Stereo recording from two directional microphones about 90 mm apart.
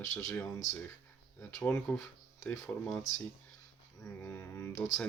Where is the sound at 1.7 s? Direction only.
25° left (ahead or behind).